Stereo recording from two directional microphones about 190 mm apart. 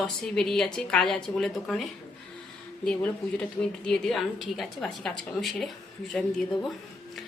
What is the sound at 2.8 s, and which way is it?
A woman's voice, 5° left (ahead or behind).